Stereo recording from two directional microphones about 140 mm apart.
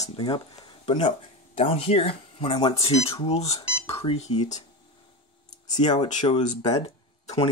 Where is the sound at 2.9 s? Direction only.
45° left (ahead or behind).